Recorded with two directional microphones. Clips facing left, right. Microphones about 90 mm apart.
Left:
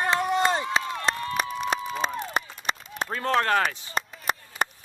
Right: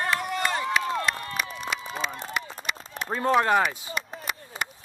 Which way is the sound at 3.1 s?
15° right (ahead or behind).